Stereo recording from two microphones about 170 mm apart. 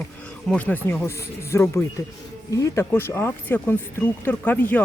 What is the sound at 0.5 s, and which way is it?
Speech, 10° left (ahead or behind).